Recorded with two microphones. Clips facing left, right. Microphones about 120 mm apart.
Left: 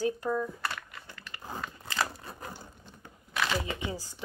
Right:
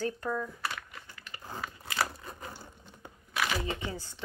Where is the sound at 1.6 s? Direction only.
5° right (ahead or behind).